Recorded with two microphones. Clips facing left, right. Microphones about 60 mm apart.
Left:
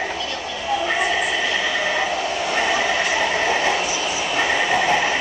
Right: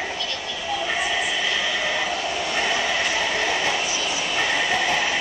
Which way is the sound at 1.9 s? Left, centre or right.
Centre.